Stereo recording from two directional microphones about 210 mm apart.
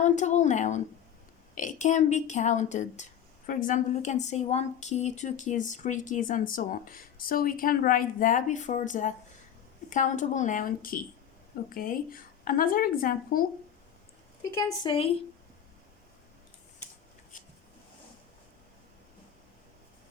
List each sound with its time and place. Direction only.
0.0 s a woman's voice: 35° left (ahead or behind)
14.6 s a woman's voice: 20° left (ahead or behind)